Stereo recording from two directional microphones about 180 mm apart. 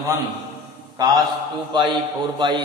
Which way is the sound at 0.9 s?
25° right (ahead or behind).